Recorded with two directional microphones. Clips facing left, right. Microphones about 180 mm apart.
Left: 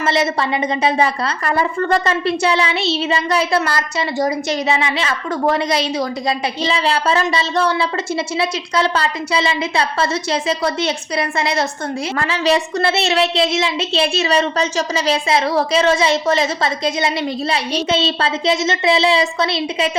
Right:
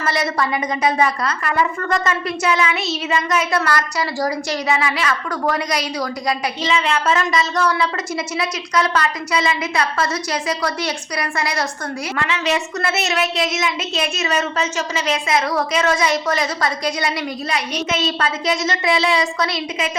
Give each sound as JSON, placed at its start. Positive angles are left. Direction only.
{"t": 0.0, "sound": "a woman's voice", "side_deg": 25}
{"t": 12.1, "sound": "a woman's voice", "side_deg": 35}